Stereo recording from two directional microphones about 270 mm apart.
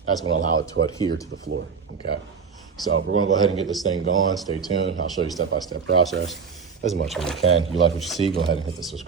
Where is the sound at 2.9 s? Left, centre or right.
Right.